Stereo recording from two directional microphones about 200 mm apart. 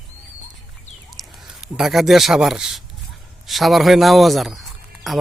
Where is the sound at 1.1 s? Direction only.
Centre (ahead or behind).